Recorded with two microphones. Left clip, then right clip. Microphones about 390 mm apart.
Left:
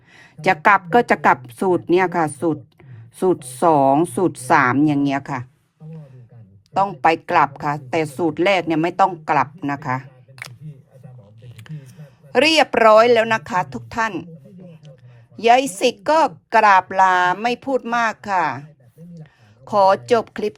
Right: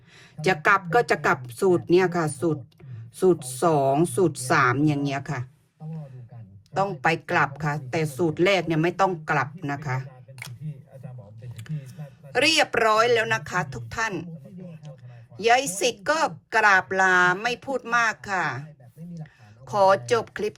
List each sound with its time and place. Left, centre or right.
0.2 s a woman's voice: centre
3.3 s a woman's voice: centre
6.7 s a woman's voice: centre
12.3 s a woman's voice: centre
15.4 s a woman's voice: centre